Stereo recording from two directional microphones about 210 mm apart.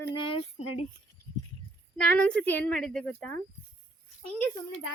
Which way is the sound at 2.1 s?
5° left (ahead or behind).